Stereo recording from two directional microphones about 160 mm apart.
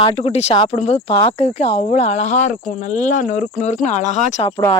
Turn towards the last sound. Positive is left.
turn(degrees=20)  # may be behind; listen again after turning